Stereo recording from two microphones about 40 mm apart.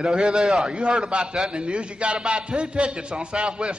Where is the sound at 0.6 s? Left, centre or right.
Right.